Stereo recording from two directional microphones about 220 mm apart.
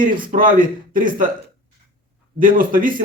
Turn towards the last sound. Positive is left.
turn(degrees=-40)  # may be behind; listen again after turning